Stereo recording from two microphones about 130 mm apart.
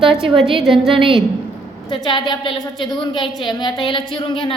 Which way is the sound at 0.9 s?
40° right (ahead or behind).